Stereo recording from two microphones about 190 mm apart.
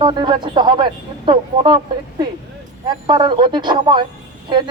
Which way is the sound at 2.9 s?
25° right (ahead or behind).